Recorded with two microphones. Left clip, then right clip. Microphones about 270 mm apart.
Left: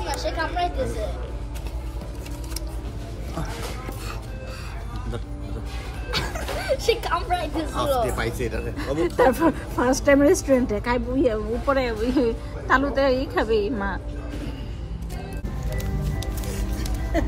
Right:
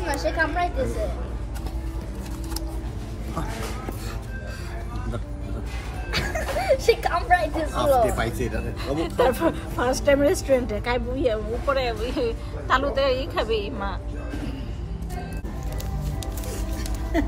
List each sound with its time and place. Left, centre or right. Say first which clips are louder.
0.0 s a sound: right 3 dB; right
6.3 s music: right 7 dB; right
7.7 s speech: right 3 dB; centre
9.0 s speech: left 3 dB; left